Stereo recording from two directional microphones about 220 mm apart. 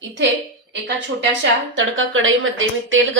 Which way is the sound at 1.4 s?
60° right (ahead or behind).